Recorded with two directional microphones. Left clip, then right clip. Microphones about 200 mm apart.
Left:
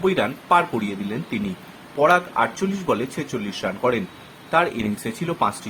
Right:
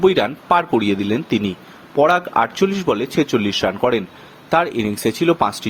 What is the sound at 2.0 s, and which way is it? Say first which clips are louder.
Speech: right 3 dB; 45° right (ahead or behind).